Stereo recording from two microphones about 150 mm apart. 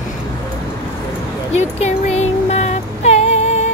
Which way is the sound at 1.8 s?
45° left (ahead or behind).